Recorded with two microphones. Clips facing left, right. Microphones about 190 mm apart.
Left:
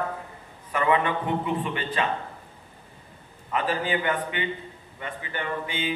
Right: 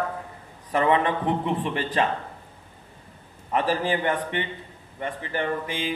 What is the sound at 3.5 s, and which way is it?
Speech, 35° right (ahead or behind).